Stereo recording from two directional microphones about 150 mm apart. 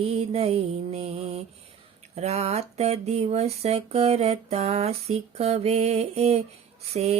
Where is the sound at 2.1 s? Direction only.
45° right (ahead or behind).